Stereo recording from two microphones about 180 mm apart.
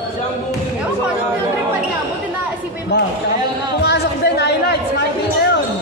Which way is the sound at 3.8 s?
65° left (ahead or behind).